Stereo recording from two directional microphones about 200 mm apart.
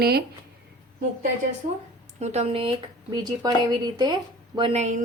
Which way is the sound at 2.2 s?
35° right (ahead or behind).